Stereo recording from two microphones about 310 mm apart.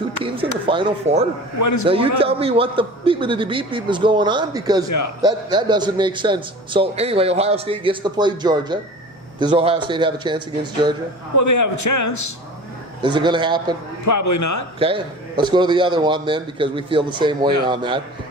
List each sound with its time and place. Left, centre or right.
0.6 s a man's voice: centre
1.5 s a man's voice: left
1.9 s a man's voice: centre
4.9 s a man's voice: left
5.2 s a man's voice: centre
11.3 s a man's voice: left
13.0 s a man's voice: centre
14.0 s a man's voice: left
14.8 s a man's voice: centre